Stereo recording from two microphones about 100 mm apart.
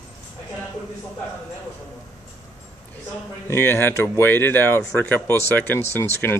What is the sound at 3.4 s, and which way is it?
Speech, 25° left (ahead or behind).